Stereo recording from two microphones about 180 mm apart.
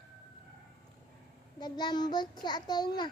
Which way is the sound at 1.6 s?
25° left (ahead or behind).